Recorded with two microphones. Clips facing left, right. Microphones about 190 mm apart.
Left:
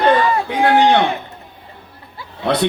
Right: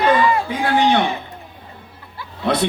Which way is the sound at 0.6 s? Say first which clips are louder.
Left 5 dB; 60° left (ahead or behind).